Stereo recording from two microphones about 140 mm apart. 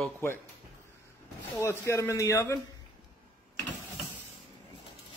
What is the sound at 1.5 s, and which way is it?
Speech, 20° left (ahead or behind).